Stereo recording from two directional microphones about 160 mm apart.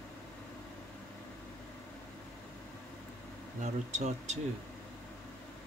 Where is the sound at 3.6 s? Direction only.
45° right (ahead or behind).